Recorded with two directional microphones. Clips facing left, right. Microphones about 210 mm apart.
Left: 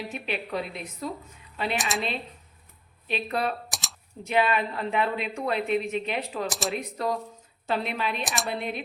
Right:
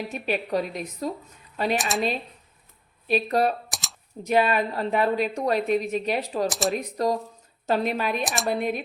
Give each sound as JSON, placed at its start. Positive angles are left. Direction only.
{"t": 0.1, "sound": "a woman's voice", "side_deg": -40}
{"t": 1.7, "sound": "speech", "side_deg": 0}
{"t": 3.1, "sound": "a woman's voice", "side_deg": -40}
{"t": 3.7, "sound": "typing", "side_deg": 0}
{"t": 4.2, "sound": "a woman's voice", "side_deg": -40}
{"t": 6.5, "sound": "speech", "side_deg": 0}
{"t": 6.7, "sound": "a woman's voice", "side_deg": -40}
{"t": 8.2, "sound": "speech", "side_deg": 0}
{"t": 8.4, "sound": "a woman's voice", "side_deg": -45}